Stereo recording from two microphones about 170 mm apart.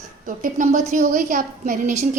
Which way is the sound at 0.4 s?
50° right (ahead or behind).